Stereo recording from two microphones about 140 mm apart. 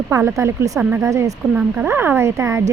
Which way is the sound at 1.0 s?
25° right (ahead or behind).